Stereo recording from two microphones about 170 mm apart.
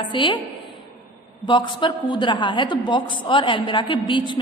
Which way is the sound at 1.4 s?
30° left (ahead or behind).